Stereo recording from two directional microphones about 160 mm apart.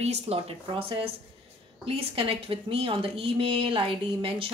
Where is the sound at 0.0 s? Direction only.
40° right (ahead or behind).